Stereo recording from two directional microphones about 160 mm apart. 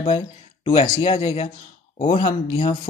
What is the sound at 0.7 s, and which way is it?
Speech, 30° left (ahead or behind).